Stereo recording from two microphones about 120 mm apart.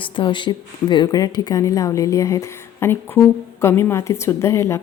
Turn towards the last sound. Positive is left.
turn(degrees=25)  # may be behind; listen again after turning